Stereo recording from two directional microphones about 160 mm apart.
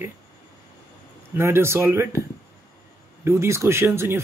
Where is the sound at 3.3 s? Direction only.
15° right (ahead or behind).